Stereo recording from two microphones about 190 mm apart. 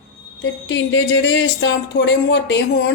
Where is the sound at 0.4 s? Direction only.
75° left (ahead or behind).